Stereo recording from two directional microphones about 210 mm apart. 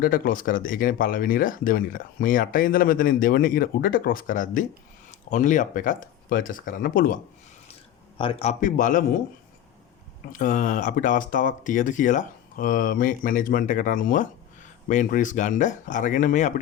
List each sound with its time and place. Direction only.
0.0 s speech: 45° left (ahead or behind)
8.2 s speech: 25° left (ahead or behind)
10.3 s speech: 40° left (ahead or behind)